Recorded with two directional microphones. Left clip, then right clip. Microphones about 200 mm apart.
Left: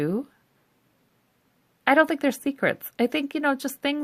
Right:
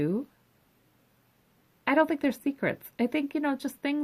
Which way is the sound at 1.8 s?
45° left (ahead or behind).